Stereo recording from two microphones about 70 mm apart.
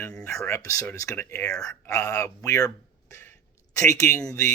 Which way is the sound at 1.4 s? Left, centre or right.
Left.